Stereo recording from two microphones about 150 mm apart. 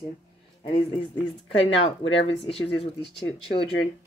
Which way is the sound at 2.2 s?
40° left (ahead or behind).